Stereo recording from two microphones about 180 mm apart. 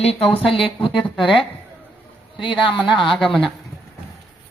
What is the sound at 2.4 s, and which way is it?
Speech, 30° left (ahead or behind).